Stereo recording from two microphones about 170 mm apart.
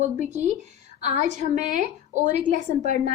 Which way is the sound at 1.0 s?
40° right (ahead or behind).